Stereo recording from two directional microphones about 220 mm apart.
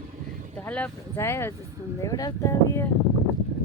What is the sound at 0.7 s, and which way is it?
Speech, 10° left (ahead or behind).